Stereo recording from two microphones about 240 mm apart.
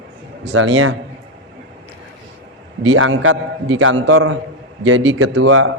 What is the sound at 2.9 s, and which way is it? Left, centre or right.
A man's voice, right.